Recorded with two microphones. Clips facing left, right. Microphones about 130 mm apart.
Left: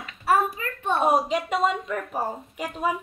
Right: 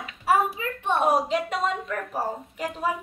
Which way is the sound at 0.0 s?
10° right (ahead or behind).